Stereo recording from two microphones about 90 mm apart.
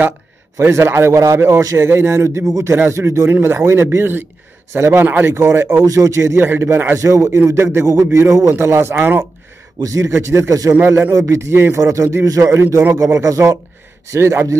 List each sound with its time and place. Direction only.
0.6 s a man's voice: 30° right (ahead or behind)
5.9 s a man's voice: 35° right (ahead or behind); by 9.2 s 20° right (ahead or behind)
9.8 s a man's voice: 35° right (ahead or behind)
10.7 s a man's voice: 25° right (ahead or behind)
12.9 s a man's voice: 40° right (ahead or behind)